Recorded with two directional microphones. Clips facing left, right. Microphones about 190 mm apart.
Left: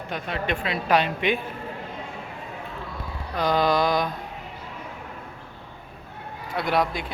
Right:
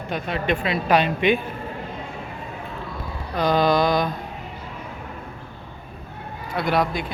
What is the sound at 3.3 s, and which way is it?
Mantra, 5° left (ahead or behind).